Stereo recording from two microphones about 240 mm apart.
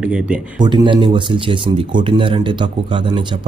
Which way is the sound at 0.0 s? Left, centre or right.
Centre.